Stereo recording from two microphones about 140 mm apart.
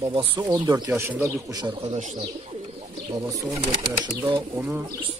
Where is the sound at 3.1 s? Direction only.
25° right (ahead or behind).